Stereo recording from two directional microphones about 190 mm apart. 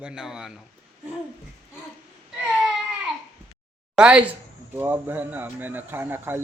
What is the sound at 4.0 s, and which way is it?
A man's voice, 5° right (ahead or behind).